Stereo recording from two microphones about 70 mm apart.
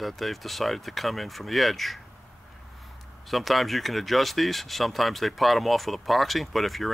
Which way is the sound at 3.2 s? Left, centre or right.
Centre.